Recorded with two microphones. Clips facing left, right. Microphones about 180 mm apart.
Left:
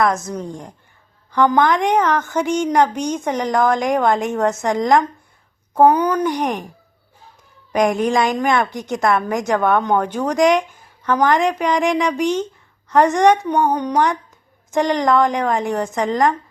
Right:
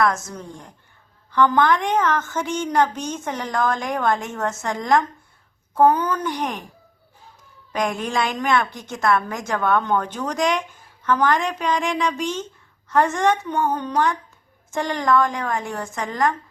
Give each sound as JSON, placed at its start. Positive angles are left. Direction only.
{"t": 0.0, "sound": "a woman's voice", "side_deg": 20}
{"t": 7.7, "sound": "a woman's voice", "side_deg": 15}